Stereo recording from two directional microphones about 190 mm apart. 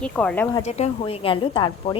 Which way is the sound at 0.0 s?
5° left (ahead or behind).